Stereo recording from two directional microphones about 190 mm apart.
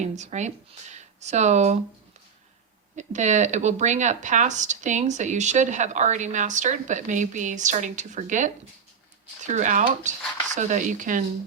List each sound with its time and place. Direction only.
0.0 s speech: 35° right (ahead or behind)
2.9 s speech: 40° right (ahead or behind)